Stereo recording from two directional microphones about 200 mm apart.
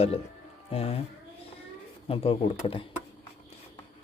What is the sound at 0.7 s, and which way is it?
Speech, 30° left (ahead or behind).